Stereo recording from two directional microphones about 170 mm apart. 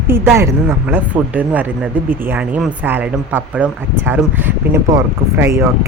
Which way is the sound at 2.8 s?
10° right (ahead or behind).